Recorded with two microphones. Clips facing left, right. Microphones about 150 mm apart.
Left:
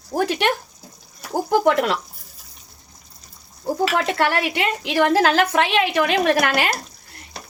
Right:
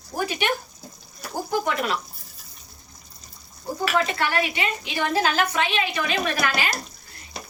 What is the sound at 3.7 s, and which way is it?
A woman's voice, 75° left (ahead or behind).